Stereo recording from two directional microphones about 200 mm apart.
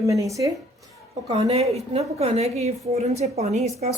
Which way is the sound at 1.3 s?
30° right (ahead or behind).